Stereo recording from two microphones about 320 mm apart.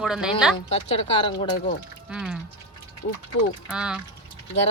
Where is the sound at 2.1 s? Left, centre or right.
Centre.